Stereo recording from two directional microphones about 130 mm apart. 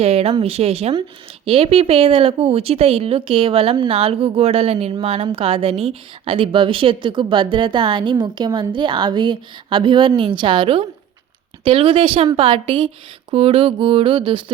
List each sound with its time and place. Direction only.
0.0 s a woman's voice: 50° right (ahead or behind)